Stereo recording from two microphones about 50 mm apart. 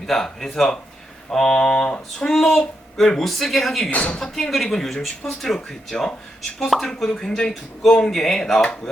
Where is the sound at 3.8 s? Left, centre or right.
Left.